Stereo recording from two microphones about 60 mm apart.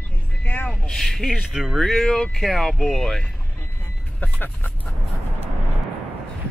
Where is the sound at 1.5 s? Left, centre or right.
Centre.